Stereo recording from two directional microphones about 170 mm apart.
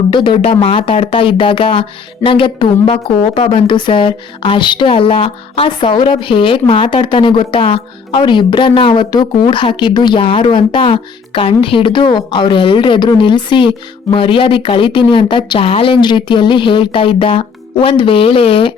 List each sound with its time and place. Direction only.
0.1 s speech: 30° left (ahead or behind)